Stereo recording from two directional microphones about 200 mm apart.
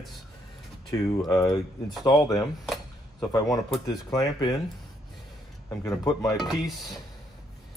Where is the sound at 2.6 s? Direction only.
Centre (ahead or behind).